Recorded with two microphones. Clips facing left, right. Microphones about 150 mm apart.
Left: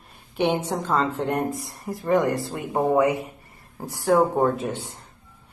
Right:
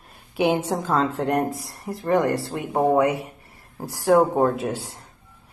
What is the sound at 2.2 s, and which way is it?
Speech, 65° right (ahead or behind).